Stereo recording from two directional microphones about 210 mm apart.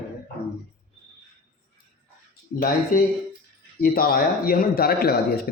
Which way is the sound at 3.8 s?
45° left (ahead or behind).